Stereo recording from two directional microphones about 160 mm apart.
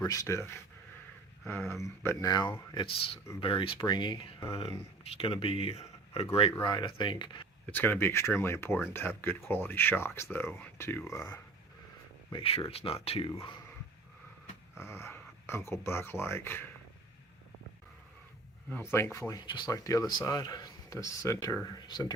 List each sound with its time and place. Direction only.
0.0 s speech: 20° left (ahead or behind)
7.7 s speech: 15° left (ahead or behind)
12.3 s speech: 35° left (ahead or behind)
14.8 s speech: 15° left (ahead or behind)
18.7 s speech: 15° left (ahead or behind)